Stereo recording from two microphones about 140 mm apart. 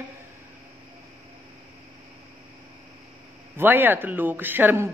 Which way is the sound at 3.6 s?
15° right (ahead or behind).